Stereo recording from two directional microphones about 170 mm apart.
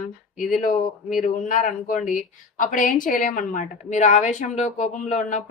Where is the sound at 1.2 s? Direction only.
50° left (ahead or behind).